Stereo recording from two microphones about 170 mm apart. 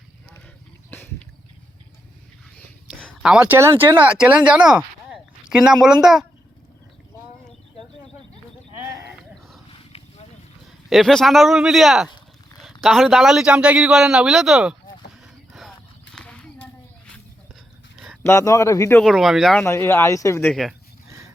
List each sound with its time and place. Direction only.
2.9 s a sound: 5° left (ahead or behind)
3.3 s speech: 10° right (ahead or behind)
10.8 s a man's voice: centre (ahead or behind)
16.1 s horse: 5° left (ahead or behind)
17.9 s a sound: 5° right (ahead or behind)
18.2 s speech: 15° left (ahead or behind)
18.9 s a man's voice: centre (ahead or behind)
19.5 s speech: 15° left (ahead or behind)
20.5 s a man's voice: centre (ahead or behind)